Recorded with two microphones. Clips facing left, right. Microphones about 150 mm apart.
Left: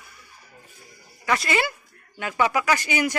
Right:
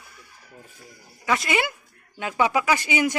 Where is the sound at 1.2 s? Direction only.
15° right (ahead or behind).